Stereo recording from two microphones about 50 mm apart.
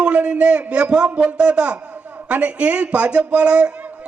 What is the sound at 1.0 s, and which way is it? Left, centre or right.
Speech, right.